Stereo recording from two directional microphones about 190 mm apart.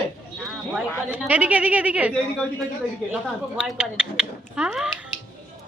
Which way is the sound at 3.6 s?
5° right (ahead or behind).